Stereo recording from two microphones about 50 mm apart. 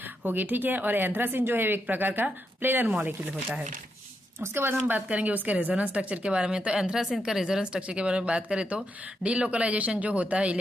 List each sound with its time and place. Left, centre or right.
0.0 s a woman's voice: right
2.9 s a woman's voice: right
4.4 s a woman's voice: right
5.0 s a woman's voice: right